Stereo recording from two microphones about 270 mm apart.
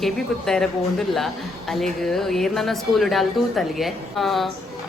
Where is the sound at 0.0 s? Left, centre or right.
Centre.